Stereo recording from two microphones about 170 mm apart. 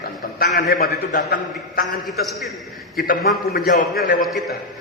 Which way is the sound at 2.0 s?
Centre (ahead or behind).